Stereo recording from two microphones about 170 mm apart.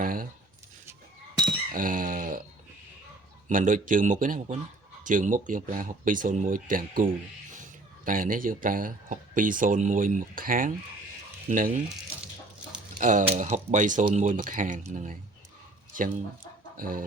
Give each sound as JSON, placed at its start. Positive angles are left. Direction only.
{"t": 0.0, "sound": "speech", "side_deg": -55}
{"t": 1.7, "sound": "a sound", "side_deg": -55}
{"t": 3.5, "sound": "speech", "side_deg": -50}
{"t": 13.0, "sound": "speech", "side_deg": -45}
{"t": 15.9, "sound": "speech", "side_deg": -50}